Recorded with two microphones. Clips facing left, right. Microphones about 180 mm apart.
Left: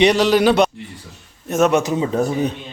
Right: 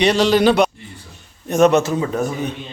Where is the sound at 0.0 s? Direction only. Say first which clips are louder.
Even; 15° left (ahead or behind).